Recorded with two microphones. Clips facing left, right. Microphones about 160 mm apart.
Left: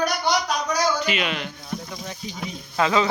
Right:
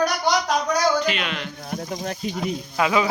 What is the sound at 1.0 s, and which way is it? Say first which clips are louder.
Speech: right 1 dB; 5° left (ahead or behind).